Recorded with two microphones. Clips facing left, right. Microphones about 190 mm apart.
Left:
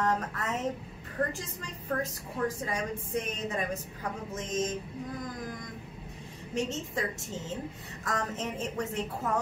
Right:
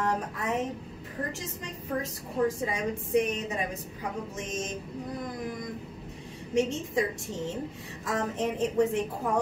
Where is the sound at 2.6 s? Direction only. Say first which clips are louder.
Right 3 dB; 15° right (ahead or behind).